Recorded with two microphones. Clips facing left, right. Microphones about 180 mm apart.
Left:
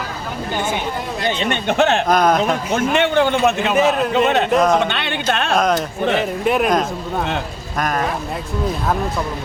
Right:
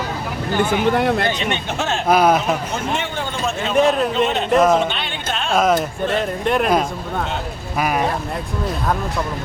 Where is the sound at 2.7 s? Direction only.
65° left (ahead or behind).